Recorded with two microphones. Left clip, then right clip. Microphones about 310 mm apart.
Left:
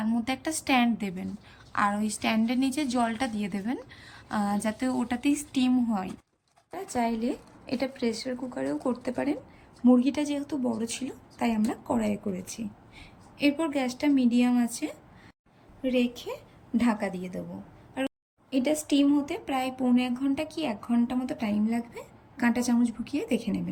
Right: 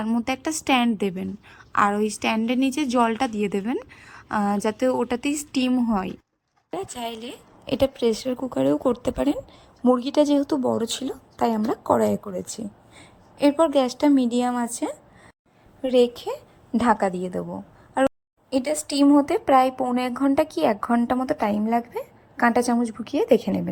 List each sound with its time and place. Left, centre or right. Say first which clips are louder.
0.0 s a woman's voice: right 5 dB; centre
10.5 s speech: right 8 dB; right
10.8 s a woman's voice: right 8 dB; centre
18.5 s a woman's voice: right 2 dB; centre